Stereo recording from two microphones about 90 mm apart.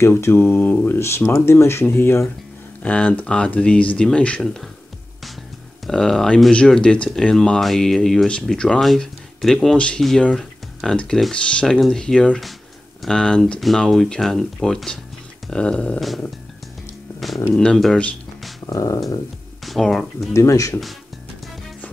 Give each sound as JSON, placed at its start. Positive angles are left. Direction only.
{"t": 0.0, "sound": "speech", "side_deg": 30}
{"t": 5.9, "sound": "speech", "side_deg": 5}
{"t": 17.6, "sound": "speech", "side_deg": 5}
{"t": 18.7, "sound": "speech", "side_deg": 35}
{"t": 19.6, "sound": "speech", "side_deg": 0}
{"t": 20.3, "sound": "speech", "side_deg": 35}